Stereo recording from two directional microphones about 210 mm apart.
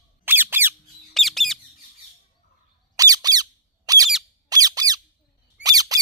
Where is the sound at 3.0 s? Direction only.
15° right (ahead or behind).